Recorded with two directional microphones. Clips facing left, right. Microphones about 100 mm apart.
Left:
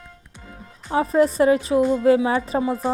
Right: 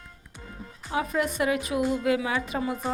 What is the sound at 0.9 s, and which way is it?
A woman's voice, 35° left (ahead or behind).